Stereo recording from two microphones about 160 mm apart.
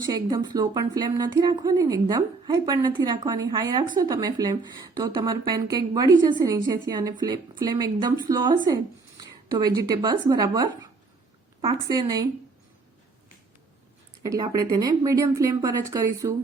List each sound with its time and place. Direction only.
0.1 s a woman's voice: 25° right (ahead or behind)
11.9 s a woman's voice: 25° right (ahead or behind)
14.3 s a woman's voice: 25° right (ahead or behind)